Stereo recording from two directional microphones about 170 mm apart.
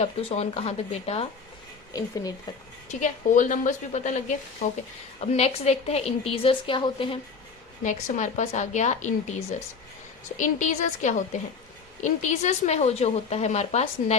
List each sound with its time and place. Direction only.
0.0 s speech: 35° left (ahead or behind)
1.9 s speech: 20° left (ahead or behind)
2.9 s speech: 45° left (ahead or behind); by 7.2 s 30° left (ahead or behind)
7.9 s speech: 45° left (ahead or behind)